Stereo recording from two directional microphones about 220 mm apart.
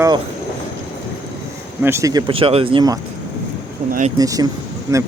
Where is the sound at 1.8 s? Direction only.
10° right (ahead or behind).